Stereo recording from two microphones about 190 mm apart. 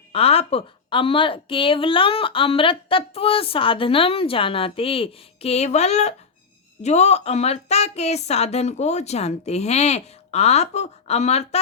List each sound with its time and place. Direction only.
0.1 s a woman's voice: 30° left (ahead or behind)